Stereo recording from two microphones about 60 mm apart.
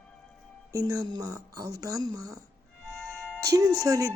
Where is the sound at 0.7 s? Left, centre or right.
Right.